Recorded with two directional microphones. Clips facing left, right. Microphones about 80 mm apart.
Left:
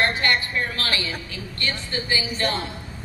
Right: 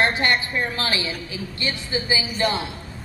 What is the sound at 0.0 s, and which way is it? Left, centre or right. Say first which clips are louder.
A woman's voice: right 1 dB; centre.